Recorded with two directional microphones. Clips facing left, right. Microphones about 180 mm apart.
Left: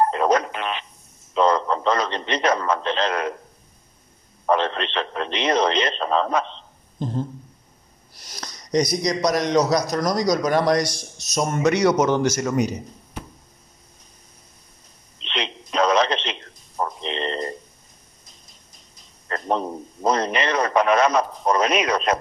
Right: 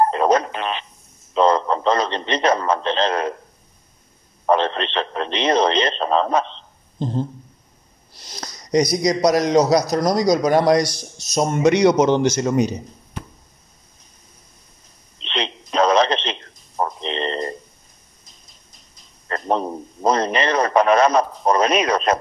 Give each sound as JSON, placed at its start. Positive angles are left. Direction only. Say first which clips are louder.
{"t": 0.0, "sound": "speech", "louder": "right 2 dB", "side_deg": -30}
{"t": 4.5, "sound": "a man's voice", "louder": "right 3 dB", "side_deg": -30}
{"t": 9.5, "sound": "a man's voice", "louder": "right 4 dB", "side_deg": -35}
{"t": 15.2, "sound": "radio", "louder": "right 3 dB", "side_deg": -35}
{"t": 19.2, "sound": "a man's voice", "louder": "right 2 dB", "side_deg": -35}